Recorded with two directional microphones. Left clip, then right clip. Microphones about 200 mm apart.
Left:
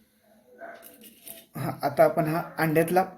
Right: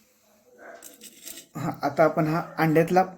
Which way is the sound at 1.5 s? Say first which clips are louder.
Right 1 dB; 10° right (ahead or behind).